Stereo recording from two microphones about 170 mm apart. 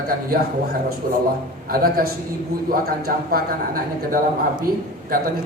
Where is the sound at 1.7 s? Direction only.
60° right (ahead or behind).